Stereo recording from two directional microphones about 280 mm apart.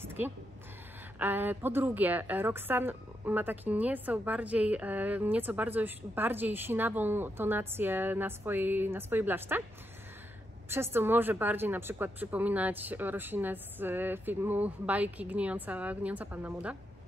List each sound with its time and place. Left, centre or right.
0.0 s a sound: centre
1.2 s a woman's voice: centre
10.7 s a woman's voice: centre